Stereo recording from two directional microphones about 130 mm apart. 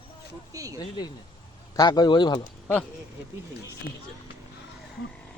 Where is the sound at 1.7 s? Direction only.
30° left (ahead or behind).